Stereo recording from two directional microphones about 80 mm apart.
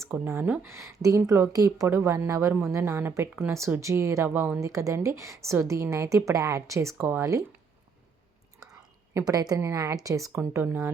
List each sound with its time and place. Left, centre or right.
0.1 s a woman's voice: right
0.4 s a woman's voice: centre
0.7 s a woman's voice: right
4.3 s a woman's voice: right
4.6 s a woman's voice: right
8.7 s a sound: right
9.6 s speech: right
10.3 s a woman's voice: right